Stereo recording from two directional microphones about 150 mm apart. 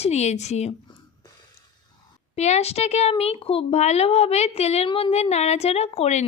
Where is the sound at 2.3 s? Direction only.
45° left (ahead or behind).